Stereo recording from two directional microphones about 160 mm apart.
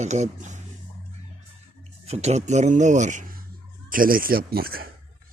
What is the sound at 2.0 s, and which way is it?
Speech, 45° right (ahead or behind).